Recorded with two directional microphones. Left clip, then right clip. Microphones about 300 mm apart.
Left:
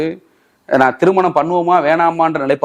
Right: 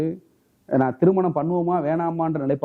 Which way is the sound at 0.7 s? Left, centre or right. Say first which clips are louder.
Left 8 dB; centre.